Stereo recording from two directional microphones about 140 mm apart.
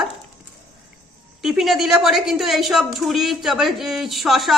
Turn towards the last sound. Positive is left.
turn(degrees=0)  # may be behind; listen again after turning